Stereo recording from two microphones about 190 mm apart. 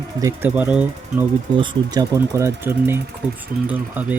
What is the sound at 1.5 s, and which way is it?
Speech, 25° right (ahead or behind).